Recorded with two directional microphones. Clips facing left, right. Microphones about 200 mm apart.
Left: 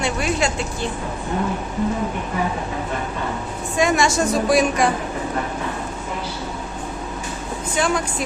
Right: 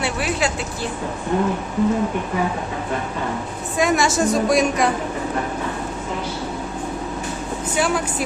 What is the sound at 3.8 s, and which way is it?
A woman's voice, centre (ahead or behind).